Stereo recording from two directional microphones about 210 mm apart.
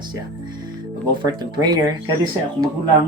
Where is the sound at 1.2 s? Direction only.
20° right (ahead or behind).